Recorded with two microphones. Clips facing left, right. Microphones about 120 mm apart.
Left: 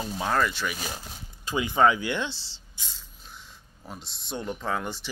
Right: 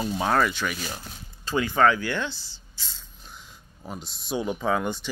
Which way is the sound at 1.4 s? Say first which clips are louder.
Right 1 dB; 15° left (ahead or behind).